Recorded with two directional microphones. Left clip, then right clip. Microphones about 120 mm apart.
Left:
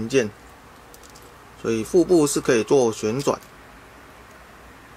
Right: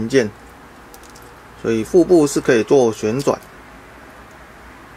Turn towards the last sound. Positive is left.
turn(degrees=5)  # may be behind; listen again after turning